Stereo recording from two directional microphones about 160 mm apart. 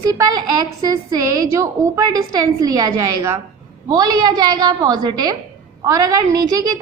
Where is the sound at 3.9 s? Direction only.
25° right (ahead or behind).